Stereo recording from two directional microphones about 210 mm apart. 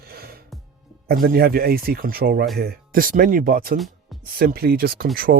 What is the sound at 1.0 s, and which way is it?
Speech, 45° right (ahead or behind).